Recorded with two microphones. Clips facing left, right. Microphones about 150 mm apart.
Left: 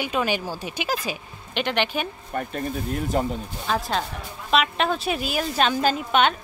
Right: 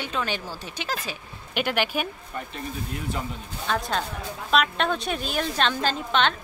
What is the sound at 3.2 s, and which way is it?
Speech, 45° left (ahead or behind).